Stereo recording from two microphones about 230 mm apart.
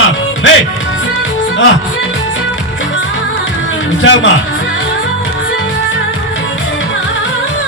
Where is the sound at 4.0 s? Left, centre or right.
Left.